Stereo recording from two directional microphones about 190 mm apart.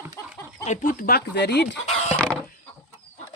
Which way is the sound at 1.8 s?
35° left (ahead or behind).